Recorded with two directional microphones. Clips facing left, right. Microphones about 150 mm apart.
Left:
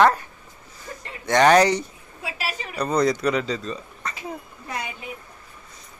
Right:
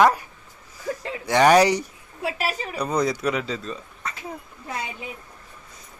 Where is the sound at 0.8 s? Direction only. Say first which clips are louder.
Right 9 dB; 90° right.